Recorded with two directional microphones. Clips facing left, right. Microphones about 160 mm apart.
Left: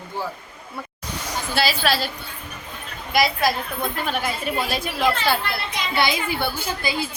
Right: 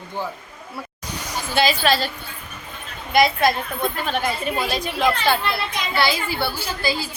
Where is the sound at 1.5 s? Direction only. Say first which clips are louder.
Right 3 dB; 5° left (ahead or behind).